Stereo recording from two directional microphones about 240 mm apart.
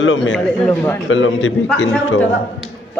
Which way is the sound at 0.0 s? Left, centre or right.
Left.